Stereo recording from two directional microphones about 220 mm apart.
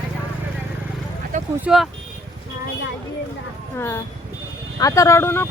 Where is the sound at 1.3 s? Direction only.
35° right (ahead or behind).